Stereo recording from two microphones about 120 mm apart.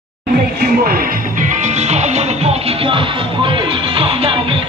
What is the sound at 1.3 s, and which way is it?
Music, 90° right.